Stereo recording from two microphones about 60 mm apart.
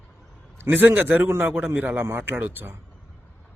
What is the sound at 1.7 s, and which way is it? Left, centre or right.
Speech, right.